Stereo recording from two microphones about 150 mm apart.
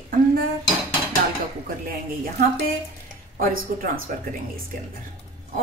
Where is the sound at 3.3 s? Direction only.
75° right (ahead or behind).